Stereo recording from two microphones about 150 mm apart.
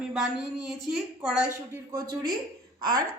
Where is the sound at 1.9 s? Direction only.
25° right (ahead or behind).